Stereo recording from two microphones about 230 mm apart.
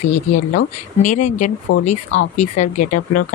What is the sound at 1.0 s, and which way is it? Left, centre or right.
Speech, left.